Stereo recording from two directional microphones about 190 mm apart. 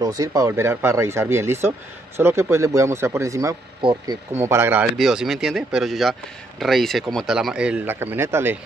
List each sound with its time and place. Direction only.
0.0 s speech: 15° right (ahead or behind)
4.4 s speech: 15° right (ahead or behind)